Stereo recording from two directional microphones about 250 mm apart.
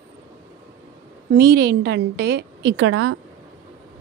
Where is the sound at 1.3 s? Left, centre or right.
Right.